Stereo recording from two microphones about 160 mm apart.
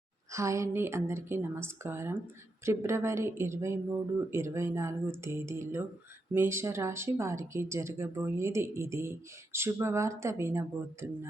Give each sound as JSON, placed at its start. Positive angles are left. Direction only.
{"t": 0.3, "sound": "speech", "side_deg": -20}